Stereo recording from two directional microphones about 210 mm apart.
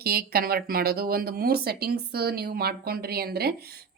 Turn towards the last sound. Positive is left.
turn(degrees=-50)  # may be behind; listen again after turning